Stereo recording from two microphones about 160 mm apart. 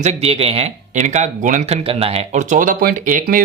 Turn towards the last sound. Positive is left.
turn(degrees=-55)  # may be behind; listen again after turning